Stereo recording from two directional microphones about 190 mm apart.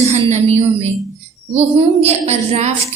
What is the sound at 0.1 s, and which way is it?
A woman's voice, 35° right (ahead or behind).